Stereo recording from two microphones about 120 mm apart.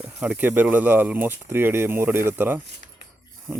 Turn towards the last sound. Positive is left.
turn(degrees=-15)  # may be behind; listen again after turning